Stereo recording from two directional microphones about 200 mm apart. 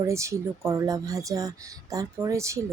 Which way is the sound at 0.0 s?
15° right (ahead or behind).